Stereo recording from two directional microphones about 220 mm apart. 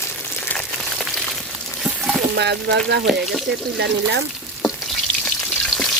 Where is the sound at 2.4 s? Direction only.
50° right (ahead or behind).